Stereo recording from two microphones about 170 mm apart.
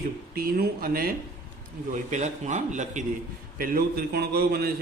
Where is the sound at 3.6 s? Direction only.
60° right (ahead or behind).